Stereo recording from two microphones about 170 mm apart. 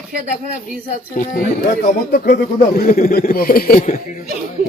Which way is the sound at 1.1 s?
50° left (ahead or behind).